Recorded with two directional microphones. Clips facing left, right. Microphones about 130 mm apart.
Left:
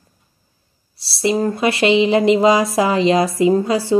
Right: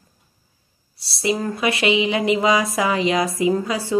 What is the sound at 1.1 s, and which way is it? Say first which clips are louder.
Speech: left 5 dB; 30° left (ahead or behind).